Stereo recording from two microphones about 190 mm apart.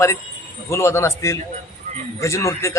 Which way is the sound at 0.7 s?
15° left (ahead or behind).